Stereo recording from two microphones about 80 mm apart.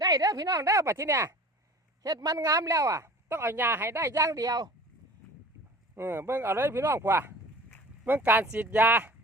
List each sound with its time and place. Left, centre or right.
0.0 s speech: right
2.0 s speech: right
6.0 s speech: right